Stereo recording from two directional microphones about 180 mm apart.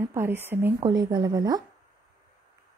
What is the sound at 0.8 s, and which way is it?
Speech, 25° right (ahead or behind).